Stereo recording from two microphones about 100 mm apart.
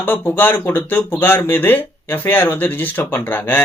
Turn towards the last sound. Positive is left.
turn(degrees=20)  # may be behind; listen again after turning